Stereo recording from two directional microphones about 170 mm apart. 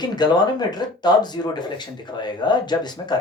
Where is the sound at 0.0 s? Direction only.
25° left (ahead or behind).